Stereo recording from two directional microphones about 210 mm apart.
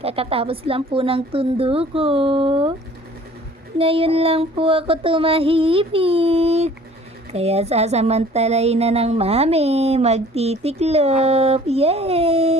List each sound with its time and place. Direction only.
0.0 s a woman's voice: 25° right (ahead or behind)
3.8 s a woman's voice: 25° right (ahead or behind)